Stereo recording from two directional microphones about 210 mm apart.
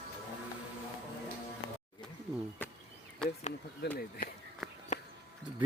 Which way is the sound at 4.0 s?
45° left (ahead or behind).